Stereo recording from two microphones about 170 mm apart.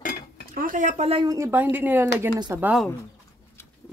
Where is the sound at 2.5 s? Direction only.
10° right (ahead or behind).